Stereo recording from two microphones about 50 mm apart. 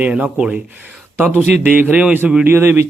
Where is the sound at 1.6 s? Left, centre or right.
Right.